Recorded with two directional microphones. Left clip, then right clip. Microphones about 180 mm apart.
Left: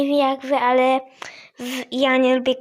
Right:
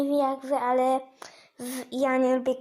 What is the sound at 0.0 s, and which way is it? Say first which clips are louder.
A child's voice: left 6 dB; 20° left (ahead or behind).